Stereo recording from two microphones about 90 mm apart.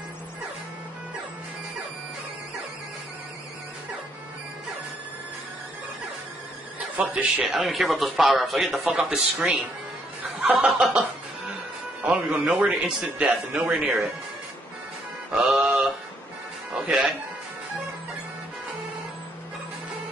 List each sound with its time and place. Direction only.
7.0 s a man's voice: 15° right (ahead or behind)
7.4 s a man's voice: centre (ahead or behind)
8.8 s a man's voice: 15° right (ahead or behind)
10.2 s snicker: 15° right (ahead or behind)
12.0 s a man's voice: 15° right (ahead or behind)
15.3 s music: 10° right (ahead or behind)
16.8 s speech: 5° right (ahead or behind)